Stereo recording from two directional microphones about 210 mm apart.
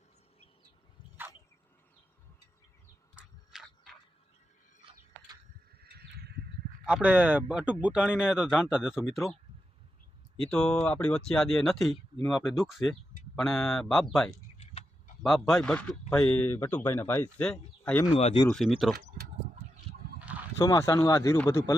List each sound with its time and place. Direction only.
3.5 s a sound: centre (ahead or behind)
5.8 s a sound: 50° right (ahead or behind)
6.8 s a man's voice: 5° right (ahead or behind)
10.5 s a man's voice: 5° left (ahead or behind)
14.6 s a sound: 30° left (ahead or behind)
15.2 s a man's voice: centre (ahead or behind)
18.1 s speech: 30° left (ahead or behind)
18.4 s a man's voice: centre (ahead or behind)
20.1 s fowl: 5° right (ahead or behind)
20.6 s speech: 15° left (ahead or behind)